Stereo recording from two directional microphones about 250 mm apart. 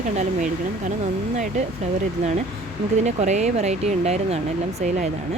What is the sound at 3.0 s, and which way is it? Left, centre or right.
Speech, right.